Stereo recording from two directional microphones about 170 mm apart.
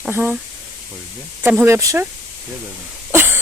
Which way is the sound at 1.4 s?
10° right (ahead or behind).